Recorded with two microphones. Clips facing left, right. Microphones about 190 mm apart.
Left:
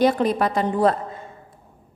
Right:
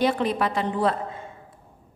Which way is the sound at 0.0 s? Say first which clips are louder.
Left 4 dB; 40° left (ahead or behind).